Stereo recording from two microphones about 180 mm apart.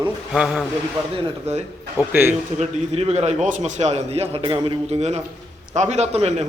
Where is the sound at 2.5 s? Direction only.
35° right (ahead or behind).